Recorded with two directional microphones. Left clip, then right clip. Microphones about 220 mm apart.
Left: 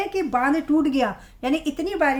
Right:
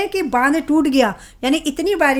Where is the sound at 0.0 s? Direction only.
45° right (ahead or behind).